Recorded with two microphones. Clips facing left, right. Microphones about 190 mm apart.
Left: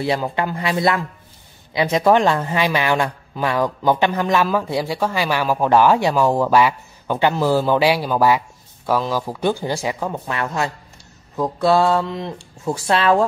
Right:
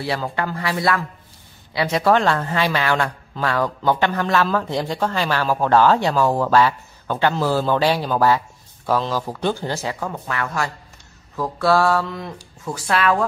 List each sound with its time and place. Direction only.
0.0 s speech: 20° left (ahead or behind)